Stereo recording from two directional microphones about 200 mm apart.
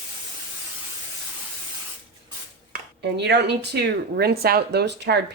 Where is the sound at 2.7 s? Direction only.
55° right (ahead or behind).